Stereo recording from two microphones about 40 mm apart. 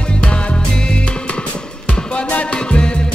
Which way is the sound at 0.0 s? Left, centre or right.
Left.